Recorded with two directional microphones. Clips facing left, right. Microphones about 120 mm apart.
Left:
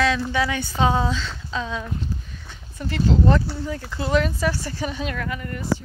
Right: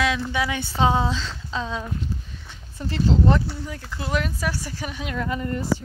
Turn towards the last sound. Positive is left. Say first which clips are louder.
# right 3 dB
turn(degrees=-25)  # may be behind; listen again after turning